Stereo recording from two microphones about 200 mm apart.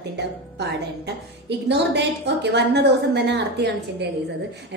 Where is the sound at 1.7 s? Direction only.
60° right (ahead or behind).